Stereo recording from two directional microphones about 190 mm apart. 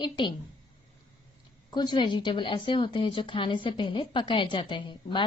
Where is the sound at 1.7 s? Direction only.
20° left (ahead or behind).